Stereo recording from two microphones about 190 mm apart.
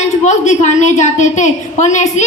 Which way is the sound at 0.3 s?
40° left (ahead or behind).